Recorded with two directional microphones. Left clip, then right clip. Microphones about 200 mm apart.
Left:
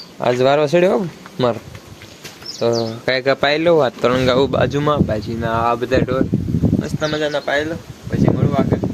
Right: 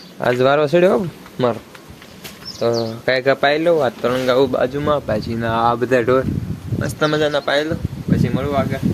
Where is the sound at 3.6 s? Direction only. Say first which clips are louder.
Left 2 dB; 30° left (ahead or behind).